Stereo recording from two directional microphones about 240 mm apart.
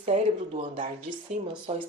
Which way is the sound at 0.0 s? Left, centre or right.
Right.